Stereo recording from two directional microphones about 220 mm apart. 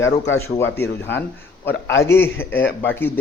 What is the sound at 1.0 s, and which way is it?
A man's voice, 10° left (ahead or behind).